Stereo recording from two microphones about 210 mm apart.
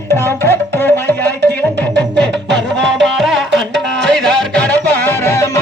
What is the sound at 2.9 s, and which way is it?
Music, centre (ahead or behind).